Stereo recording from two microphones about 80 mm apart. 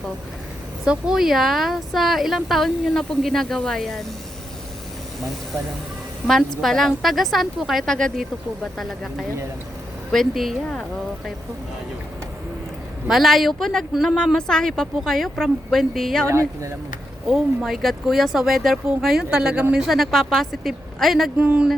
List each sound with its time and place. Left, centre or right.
0.9 s speech: centre
6.2 s speech: centre
13.1 s speech: centre
16.3 s speech: right
17.2 s speech: centre
21.3 s speech: centre